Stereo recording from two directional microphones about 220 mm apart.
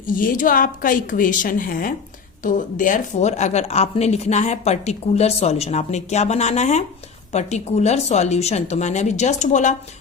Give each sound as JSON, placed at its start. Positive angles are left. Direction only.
{"t": 0.1, "sound": "a woman's voice", "side_deg": 40}